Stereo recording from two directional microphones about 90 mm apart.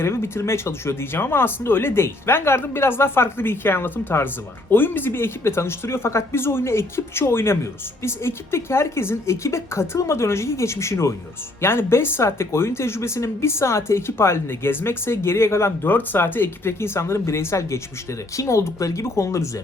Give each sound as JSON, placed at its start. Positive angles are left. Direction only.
{"t": 0.0, "sound": "a woman's voice", "side_deg": 30}